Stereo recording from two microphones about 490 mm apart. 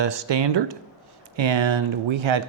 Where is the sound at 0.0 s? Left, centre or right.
Right.